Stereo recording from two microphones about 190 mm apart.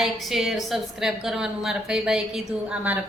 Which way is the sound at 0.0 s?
Centre (ahead or behind).